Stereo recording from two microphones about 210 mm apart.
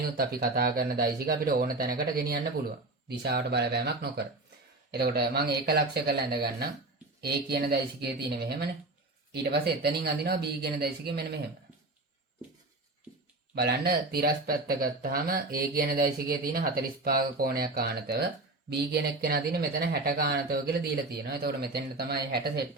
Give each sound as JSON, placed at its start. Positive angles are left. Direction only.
{"t": 0.0, "sound": "speech", "side_deg": -45}
{"t": 13.6, "sound": "speech", "side_deg": -45}